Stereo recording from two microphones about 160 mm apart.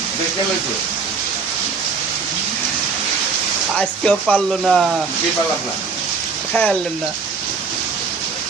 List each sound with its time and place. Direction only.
3.8 s speech: 5° left (ahead or behind)
6.5 s speech: 5° left (ahead or behind)